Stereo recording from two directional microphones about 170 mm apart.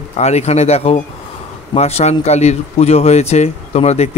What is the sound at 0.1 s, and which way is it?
A man's voice, 40° left (ahead or behind).